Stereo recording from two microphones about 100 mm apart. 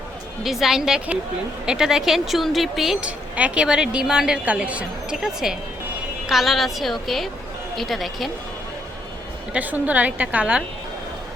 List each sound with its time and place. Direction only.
0.4 s a woman's voice: 5° right (ahead or behind)
9.5 s speech: 15° right (ahead or behind)